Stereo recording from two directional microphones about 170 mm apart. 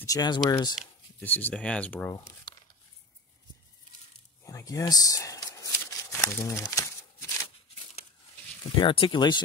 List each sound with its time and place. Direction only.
0.0 s speech: 20° left (ahead or behind)
1.2 s speech: 10° left (ahead or behind)
2.1 s crumpling: 25° left (ahead or behind)
4.5 s a sound: 20° left (ahead or behind)
7.4 s a sound: 35° left (ahead or behind)
8.7 s speech: 30° left (ahead or behind)